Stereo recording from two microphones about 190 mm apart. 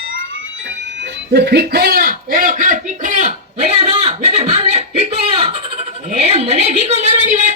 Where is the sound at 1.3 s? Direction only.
60° right (ahead or behind).